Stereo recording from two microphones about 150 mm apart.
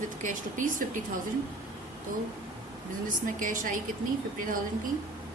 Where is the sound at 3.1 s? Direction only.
65° right (ahead or behind).